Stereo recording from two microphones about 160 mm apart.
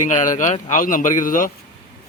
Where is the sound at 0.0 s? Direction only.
50° left (ahead or behind).